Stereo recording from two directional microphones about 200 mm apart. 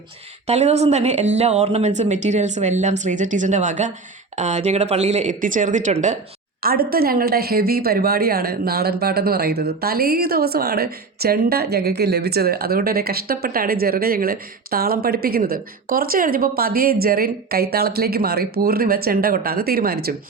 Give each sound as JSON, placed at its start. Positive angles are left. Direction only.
{"t": 0.4, "sound": "speech", "side_deg": -35}
{"t": 6.6, "sound": "speech", "side_deg": -50}